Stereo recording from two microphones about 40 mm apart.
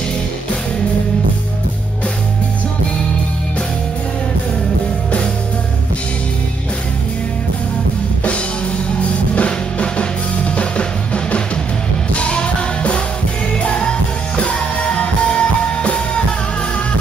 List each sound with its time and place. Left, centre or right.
9.0 s drum kit: left
12.2 s music: left